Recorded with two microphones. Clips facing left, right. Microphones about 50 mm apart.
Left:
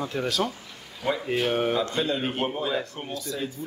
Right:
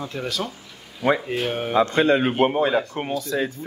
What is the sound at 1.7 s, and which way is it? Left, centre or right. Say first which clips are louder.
Speech: right 8 dB; right.